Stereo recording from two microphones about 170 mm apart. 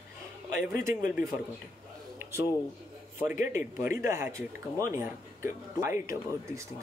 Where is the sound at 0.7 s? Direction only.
55° left (ahead or behind).